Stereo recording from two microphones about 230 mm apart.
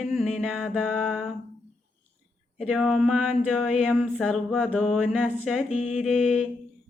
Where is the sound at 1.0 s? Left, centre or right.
Centre.